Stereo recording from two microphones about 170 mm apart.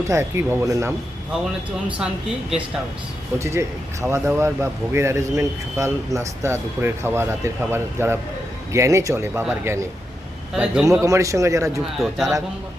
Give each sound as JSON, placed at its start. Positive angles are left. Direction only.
{"t": 0.1, "sound": "a man's voice", "side_deg": -15}
{"t": 3.3, "sound": "a man's voice", "side_deg": -15}
{"t": 11.0, "sound": "speech", "side_deg": -20}
{"t": 11.9, "sound": "speech", "side_deg": 0}